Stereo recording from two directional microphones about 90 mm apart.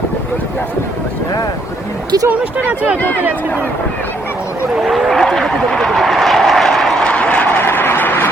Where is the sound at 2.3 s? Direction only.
15° right (ahead or behind).